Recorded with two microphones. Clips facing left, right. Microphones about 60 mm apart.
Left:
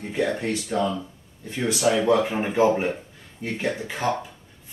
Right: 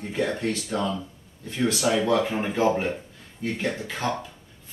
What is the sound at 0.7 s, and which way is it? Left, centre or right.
Speech, centre.